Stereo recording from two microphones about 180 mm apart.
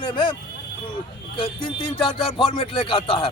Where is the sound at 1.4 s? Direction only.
30° left (ahead or behind).